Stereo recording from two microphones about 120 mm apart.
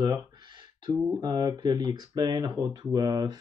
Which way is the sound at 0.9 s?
30° right (ahead or behind).